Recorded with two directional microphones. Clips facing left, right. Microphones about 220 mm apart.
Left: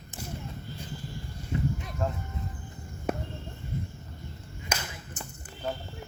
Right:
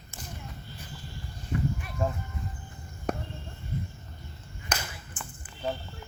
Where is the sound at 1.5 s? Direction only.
20° left (ahead or behind).